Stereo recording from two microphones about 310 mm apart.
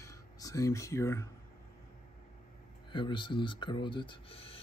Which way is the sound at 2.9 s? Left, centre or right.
Centre.